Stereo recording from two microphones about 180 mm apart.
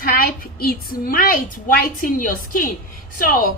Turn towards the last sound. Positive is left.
turn(degrees=50)  # may be behind; listen again after turning